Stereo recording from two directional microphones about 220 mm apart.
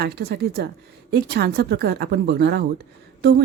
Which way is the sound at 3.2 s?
50° right (ahead or behind).